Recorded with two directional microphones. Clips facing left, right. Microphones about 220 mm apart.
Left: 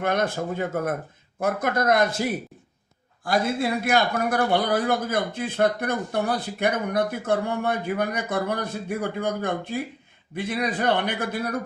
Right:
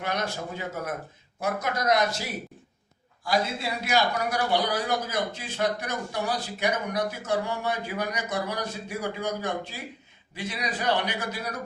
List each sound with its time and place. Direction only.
0.0 s a man's voice: 50° left (ahead or behind)